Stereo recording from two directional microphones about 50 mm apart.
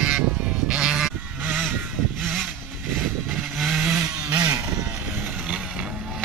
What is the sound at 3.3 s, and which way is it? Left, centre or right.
Vehicle, centre.